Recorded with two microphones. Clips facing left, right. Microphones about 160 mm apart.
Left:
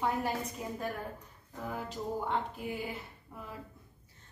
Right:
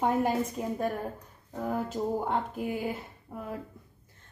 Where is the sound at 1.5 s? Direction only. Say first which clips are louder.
Right 8 dB; 45° right (ahead or behind).